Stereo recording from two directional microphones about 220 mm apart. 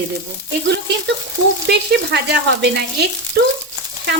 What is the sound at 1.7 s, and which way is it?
Speech, 50° right (ahead or behind).